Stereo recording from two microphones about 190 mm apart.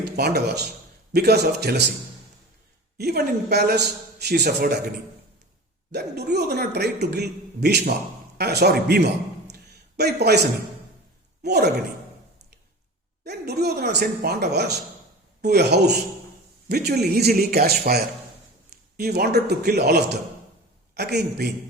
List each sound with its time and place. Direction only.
0.2 s speech: 60° right (ahead or behind)
3.0 s speech: 60° right (ahead or behind)
5.9 s speech: 60° right (ahead or behind)
11.4 s speech: 60° right (ahead or behind)
13.2 s speech: 60° right (ahead or behind)